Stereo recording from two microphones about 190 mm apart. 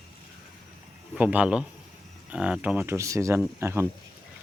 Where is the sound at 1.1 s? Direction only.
10° right (ahead or behind).